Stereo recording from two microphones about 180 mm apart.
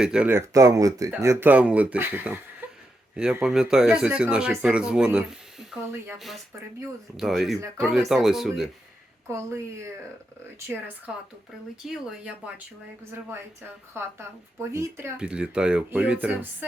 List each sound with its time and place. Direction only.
0.0 s speech: 5° right (ahead or behind)
9.3 s speech: 15° right (ahead or behind)
14.0 s speech: 15° right (ahead or behind)